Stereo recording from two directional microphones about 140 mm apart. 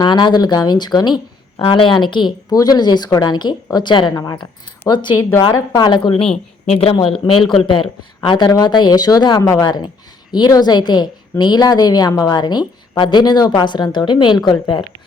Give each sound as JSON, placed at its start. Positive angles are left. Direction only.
{"t": 0.0, "sound": "a woman's voice", "side_deg": 30}
{"t": 7.3, "sound": "speech", "side_deg": 0}
{"t": 7.6, "sound": "a woman's voice", "side_deg": 35}